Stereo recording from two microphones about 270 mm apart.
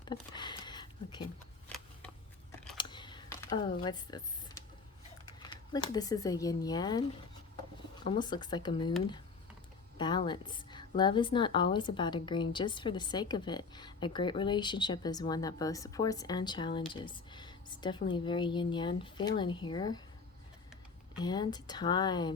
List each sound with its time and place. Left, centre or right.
0.0 s a sound: centre
2.7 s computer keyboard: centre
5.4 s a woman's voice: centre
10.0 s a woman's voice: centre
21.2 s a woman's voice: centre